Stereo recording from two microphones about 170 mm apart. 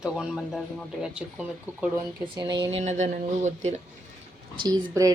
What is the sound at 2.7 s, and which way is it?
Speech, 45° right (ahead or behind).